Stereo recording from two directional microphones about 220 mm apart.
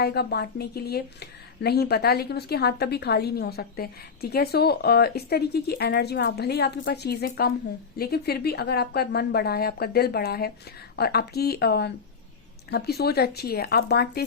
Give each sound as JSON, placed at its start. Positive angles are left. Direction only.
{"t": 0.0, "sound": "speech", "side_deg": 45}